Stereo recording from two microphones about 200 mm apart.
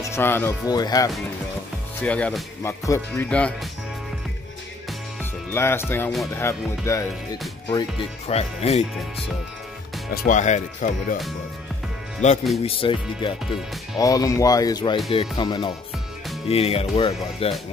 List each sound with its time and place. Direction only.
0.0 s speech: 10° left (ahead or behind)
2.0 s speech: 5° left (ahead or behind)
5.2 s speech: 10° left (ahead or behind)
8.3 s speech: 30° left (ahead or behind)
10.1 s speech: 40° left (ahead or behind)
12.2 s speech: 35° left (ahead or behind)
12.6 s speech: 25° left (ahead or behind)